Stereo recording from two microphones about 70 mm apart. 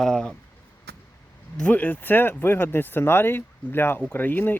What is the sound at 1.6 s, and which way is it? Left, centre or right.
Speech, left.